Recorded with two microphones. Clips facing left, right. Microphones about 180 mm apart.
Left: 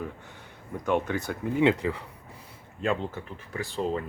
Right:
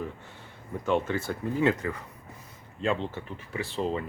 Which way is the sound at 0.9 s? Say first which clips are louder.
Even; 15° left (ahead or behind).